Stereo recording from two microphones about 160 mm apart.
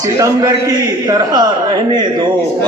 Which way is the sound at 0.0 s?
20° right (ahead or behind).